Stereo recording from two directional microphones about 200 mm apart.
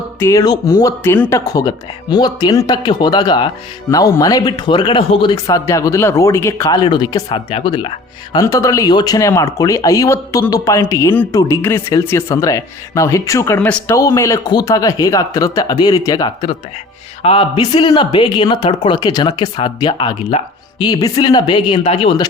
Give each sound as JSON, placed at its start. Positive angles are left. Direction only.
{"t": 0.2, "sound": "speech", "side_deg": 15}